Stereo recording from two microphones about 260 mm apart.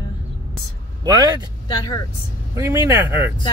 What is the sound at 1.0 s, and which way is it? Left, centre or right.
Speech, centre.